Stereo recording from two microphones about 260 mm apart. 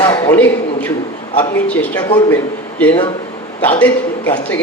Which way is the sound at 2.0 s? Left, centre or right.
Centre.